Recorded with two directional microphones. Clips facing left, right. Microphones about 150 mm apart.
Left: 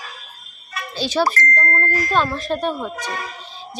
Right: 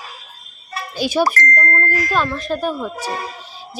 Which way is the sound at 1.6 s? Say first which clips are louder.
Right 1 dB; 5° left (ahead or behind).